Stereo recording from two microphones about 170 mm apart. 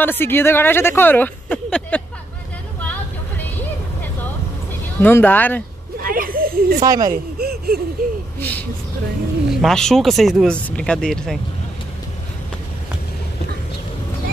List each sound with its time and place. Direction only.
0.0 s speech: 10° left (ahead or behind)
2.8 s vehicle: 10° left (ahead or behind)
5.0 s speech: 10° left (ahead or behind)
5.9 s a sound: 60° right (ahead or behind)
6.8 s speech: 20° right (ahead or behind)
7.1 s a sound: 65° right (ahead or behind)
8.4 s vehicle: 10° left (ahead or behind)
9.5 s speech: centre (ahead or behind)